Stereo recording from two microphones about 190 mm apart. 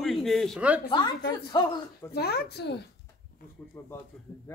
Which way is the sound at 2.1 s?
55° left (ahead or behind).